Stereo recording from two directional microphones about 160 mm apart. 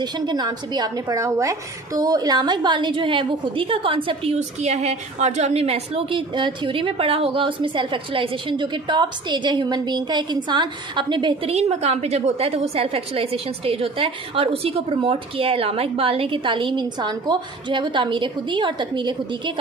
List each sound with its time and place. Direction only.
0.0 s a woman's voice: 25° right (ahead or behind)
11.5 s a woman's voice: 40° right (ahead or behind)